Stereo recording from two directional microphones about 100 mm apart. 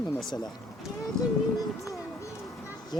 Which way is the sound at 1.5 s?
35° left (ahead or behind).